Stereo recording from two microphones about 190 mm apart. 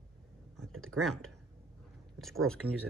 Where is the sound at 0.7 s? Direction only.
90° right.